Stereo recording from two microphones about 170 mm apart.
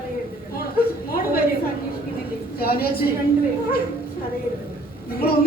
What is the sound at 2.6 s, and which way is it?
Speech, 65° left (ahead or behind).